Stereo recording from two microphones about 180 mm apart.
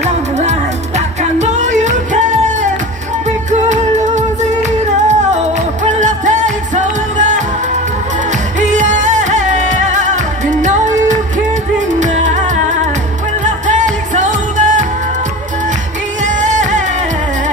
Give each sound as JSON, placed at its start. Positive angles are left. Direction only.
{"t": 0.4, "sound": "music", "side_deg": -40}
{"t": 5.9, "sound": "music", "side_deg": -45}
{"t": 8.5, "sound": "music", "side_deg": -45}
{"t": 13.7, "sound": "music", "side_deg": -45}
{"t": 16.3, "sound": "music", "side_deg": -40}